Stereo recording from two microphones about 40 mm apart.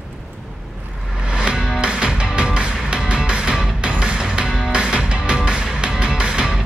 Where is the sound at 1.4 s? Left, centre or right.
Right.